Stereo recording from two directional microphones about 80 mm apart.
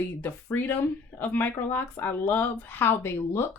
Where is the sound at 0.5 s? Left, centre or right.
Left.